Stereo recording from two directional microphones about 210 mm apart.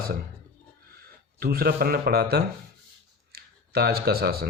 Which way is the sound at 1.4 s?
45° right (ahead or behind).